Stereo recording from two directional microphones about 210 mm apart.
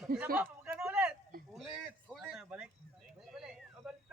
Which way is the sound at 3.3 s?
5° right (ahead or behind).